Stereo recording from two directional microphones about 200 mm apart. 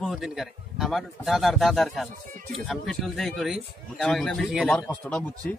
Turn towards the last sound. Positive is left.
turn(degrees=5)  # may be behind; listen again after turning